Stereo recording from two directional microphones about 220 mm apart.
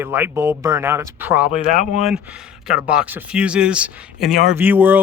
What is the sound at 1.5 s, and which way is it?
Speech, 30° left (ahead or behind).